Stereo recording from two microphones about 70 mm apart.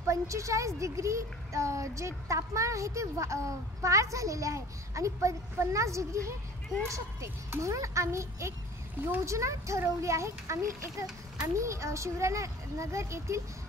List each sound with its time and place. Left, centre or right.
0.0 s a woman's voice: right